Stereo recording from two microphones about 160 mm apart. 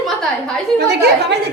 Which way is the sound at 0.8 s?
90° right.